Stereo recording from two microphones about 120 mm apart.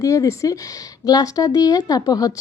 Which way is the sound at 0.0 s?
30° left (ahead or behind).